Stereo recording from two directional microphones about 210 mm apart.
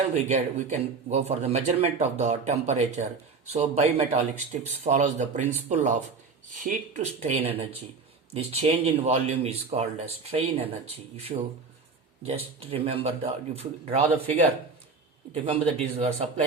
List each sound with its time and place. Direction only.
0.1 s a man's voice: 30° right (ahead or behind)